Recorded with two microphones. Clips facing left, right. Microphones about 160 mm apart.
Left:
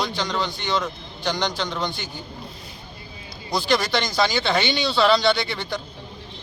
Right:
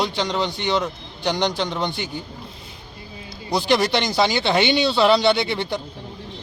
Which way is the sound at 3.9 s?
20° right (ahead or behind).